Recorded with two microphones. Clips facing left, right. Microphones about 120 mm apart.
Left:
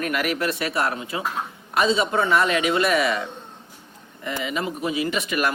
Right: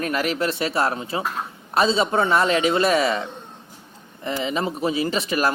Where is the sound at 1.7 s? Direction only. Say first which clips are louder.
Right 1 dB; 30° right (ahead or behind).